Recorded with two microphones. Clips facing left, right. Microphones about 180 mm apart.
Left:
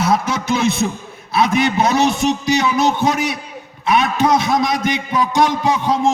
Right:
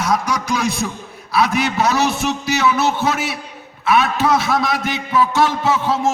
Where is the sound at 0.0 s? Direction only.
25° left (ahead or behind).